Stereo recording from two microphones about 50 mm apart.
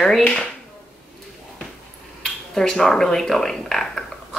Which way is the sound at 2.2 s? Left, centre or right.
Centre.